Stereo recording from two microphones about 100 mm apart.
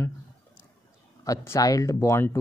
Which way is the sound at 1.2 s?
30° left (ahead or behind).